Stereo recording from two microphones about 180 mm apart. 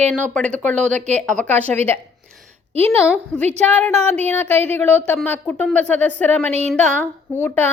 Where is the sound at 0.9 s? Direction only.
40° right (ahead or behind).